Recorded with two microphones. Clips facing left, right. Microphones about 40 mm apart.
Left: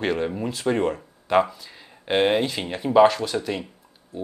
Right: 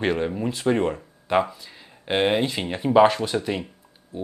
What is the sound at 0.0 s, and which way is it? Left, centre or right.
Speech, centre.